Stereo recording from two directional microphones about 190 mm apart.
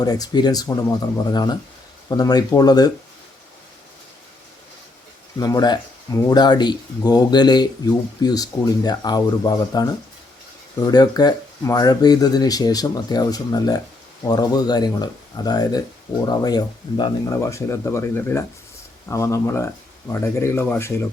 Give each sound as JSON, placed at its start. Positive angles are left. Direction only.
{"t": 0.0, "sound": "speech", "side_deg": 20}
{"t": 5.4, "sound": "speech", "side_deg": 20}